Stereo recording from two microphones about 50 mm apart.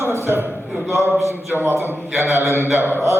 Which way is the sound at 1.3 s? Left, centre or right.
Right.